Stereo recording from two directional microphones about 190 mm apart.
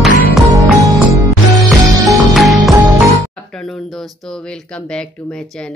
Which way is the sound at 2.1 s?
Centre (ahead or behind).